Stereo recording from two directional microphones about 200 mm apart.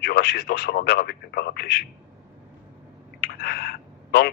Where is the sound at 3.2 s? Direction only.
50° left (ahead or behind).